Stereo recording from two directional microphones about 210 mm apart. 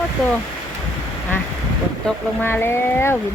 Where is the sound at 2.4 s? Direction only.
10° left (ahead or behind).